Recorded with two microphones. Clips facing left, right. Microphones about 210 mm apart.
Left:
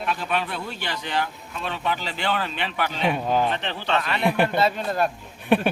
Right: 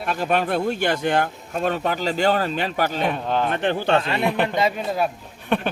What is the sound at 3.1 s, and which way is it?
Speech, 10° left (ahead or behind).